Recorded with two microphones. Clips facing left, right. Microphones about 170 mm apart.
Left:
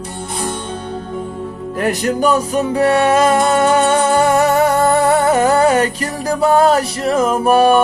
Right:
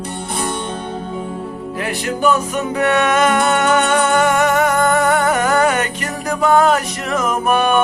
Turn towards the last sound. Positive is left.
turn(degrees=35)  # may be behind; listen again after turning